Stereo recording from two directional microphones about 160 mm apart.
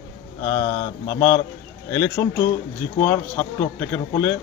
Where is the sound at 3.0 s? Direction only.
15° left (ahead or behind).